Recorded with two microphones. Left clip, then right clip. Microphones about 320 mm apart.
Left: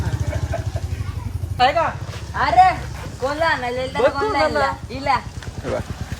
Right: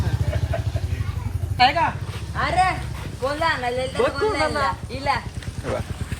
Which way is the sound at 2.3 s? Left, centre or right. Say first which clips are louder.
Left 6 dB; left.